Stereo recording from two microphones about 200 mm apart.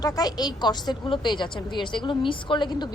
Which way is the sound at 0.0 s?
20° left (ahead or behind).